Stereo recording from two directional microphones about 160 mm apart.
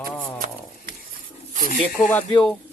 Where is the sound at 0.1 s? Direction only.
10° left (ahead or behind).